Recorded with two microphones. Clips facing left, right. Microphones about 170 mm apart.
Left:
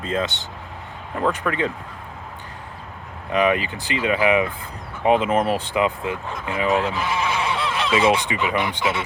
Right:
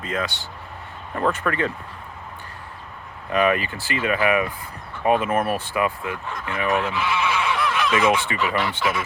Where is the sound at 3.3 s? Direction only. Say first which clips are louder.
Left 1 dB; 20° left (ahead or behind).